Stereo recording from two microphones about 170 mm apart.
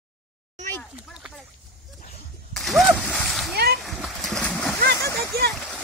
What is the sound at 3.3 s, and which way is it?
Splash, centre (ahead or behind).